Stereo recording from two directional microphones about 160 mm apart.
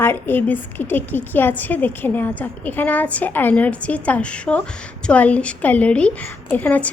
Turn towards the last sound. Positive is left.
turn(degrees=10)  # may be behind; listen again after turning